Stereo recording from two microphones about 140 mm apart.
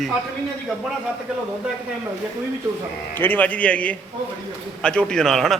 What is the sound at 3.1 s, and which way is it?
A man's voice, 15° left (ahead or behind).